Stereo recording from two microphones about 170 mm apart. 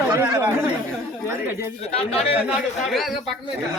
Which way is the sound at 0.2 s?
15° right (ahead or behind).